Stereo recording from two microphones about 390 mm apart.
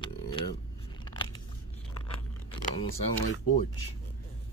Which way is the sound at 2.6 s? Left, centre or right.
Centre.